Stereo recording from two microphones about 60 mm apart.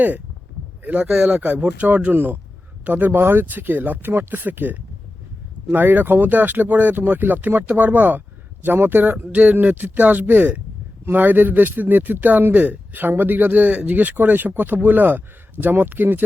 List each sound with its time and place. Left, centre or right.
1.0 s speech: centre
1.4 s a man's voice: right